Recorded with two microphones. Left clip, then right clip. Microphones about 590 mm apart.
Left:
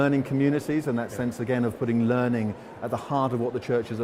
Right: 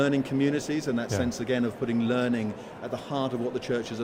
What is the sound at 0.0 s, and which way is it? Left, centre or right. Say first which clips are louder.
Speech: left 2 dB; left.